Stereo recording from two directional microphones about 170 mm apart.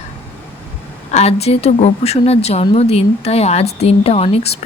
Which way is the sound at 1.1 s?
40° left (ahead or behind).